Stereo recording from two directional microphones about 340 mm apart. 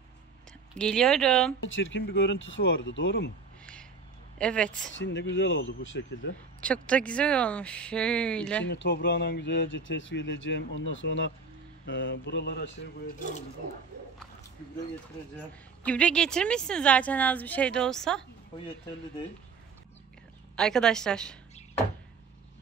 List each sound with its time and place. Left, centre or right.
0.5 s speech: centre
1.6 s speech: left
4.4 s a woman's voice: centre
4.9 s speech: left
6.3 s a woman's voice: centre
8.7 s speech: left
15.8 s a woman's voice: centre
20.5 s a woman's voice: centre